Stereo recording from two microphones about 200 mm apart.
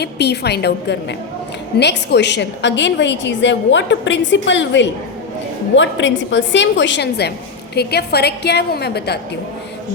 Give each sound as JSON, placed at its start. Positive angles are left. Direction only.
{"t": 0.0, "sound": "a woman's voice", "side_deg": 55}